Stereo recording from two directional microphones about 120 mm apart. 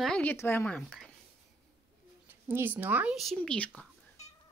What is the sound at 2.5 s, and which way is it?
Speech, 15° right (ahead or behind).